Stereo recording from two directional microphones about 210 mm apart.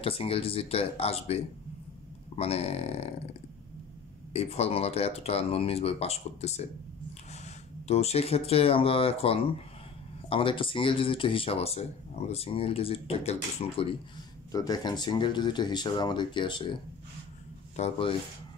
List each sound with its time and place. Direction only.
0.0 s speech: 25° left (ahead or behind)
4.3 s speech: 30° left (ahead or behind)
14.5 s speech: 15° left (ahead or behind)
17.7 s speech: 25° left (ahead or behind)